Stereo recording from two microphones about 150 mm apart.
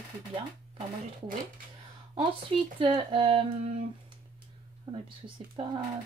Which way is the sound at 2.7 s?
35° right (ahead or behind).